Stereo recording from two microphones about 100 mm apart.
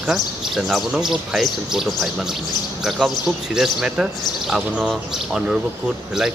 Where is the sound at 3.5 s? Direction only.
5° right (ahead or behind).